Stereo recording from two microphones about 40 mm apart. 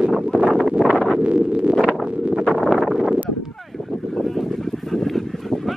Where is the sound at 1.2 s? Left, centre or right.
Right.